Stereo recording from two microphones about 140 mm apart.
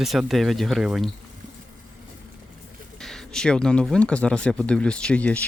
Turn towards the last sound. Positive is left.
turn(degrees=10)  # may be behind; listen again after turning